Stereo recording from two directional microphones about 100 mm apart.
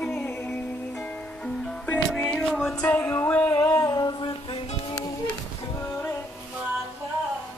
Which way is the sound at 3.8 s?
40° left (ahead or behind).